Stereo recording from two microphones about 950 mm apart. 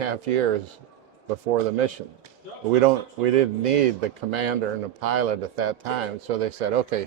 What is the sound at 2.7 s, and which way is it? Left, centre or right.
A man's voice, right.